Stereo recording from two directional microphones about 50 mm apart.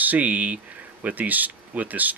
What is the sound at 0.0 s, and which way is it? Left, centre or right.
Speech, right.